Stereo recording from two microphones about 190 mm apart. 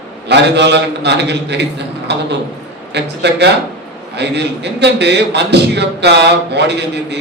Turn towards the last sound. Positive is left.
turn(degrees=-60)  # may be behind; listen again after turning